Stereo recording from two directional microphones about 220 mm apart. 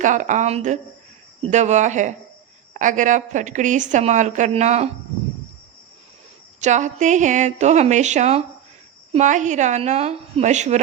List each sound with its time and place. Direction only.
0.0 s a woman's voice: 35° right (ahead or behind)
6.6 s a woman's voice: 35° right (ahead or behind)